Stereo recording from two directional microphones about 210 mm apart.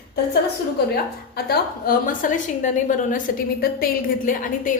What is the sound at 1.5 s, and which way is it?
A woman's voice, 40° left (ahead or behind).